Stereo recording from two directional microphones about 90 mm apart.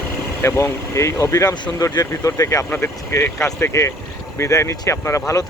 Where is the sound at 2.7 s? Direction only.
25° left (ahead or behind).